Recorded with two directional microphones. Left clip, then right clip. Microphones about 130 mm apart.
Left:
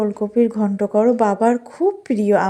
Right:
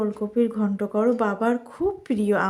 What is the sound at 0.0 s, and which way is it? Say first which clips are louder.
A woman's voice: left 6 dB; 30° left (ahead or behind).